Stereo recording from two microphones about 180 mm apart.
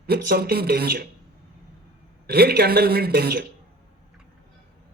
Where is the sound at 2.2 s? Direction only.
60° right (ahead or behind).